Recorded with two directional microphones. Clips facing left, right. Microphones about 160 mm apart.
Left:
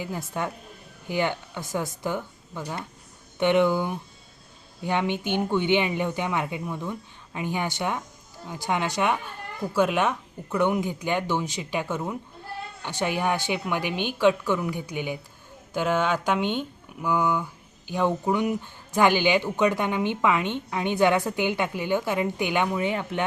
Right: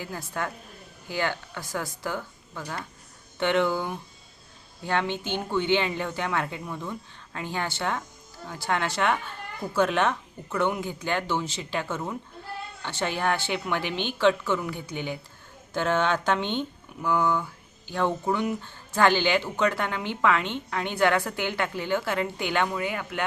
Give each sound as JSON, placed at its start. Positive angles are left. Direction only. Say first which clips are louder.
{"t": 0.0, "sound": "speech", "louder": "left 2 dB", "side_deg": 20}